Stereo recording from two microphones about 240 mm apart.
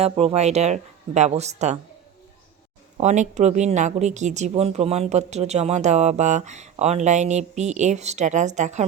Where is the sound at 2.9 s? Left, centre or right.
Right.